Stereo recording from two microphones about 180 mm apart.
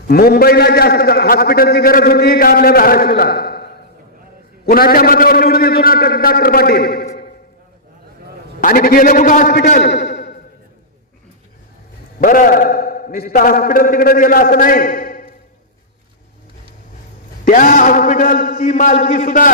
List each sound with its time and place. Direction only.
0.1 s a man's voice: 60° left (ahead or behind)
8.6 s a man's voice: 50° left (ahead or behind)
9.8 s speech: 75° left (ahead or behind)
12.2 s a man's voice: 50° left (ahead or behind)
17.4 s a man's voice: 45° left (ahead or behind)